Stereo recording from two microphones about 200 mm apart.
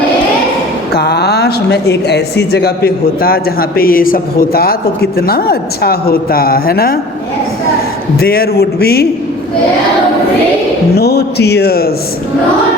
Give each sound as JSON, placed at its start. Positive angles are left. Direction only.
{"t": 0.9, "sound": "speech", "side_deg": 55}
{"t": 8.2, "sound": "speech", "side_deg": 50}
{"t": 10.9, "sound": "speech", "side_deg": 55}